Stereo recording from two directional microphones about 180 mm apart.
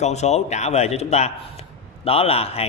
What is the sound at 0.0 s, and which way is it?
A man's voice, 40° left (ahead or behind).